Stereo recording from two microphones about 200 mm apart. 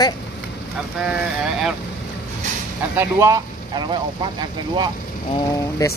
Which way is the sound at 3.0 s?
15° right (ahead or behind).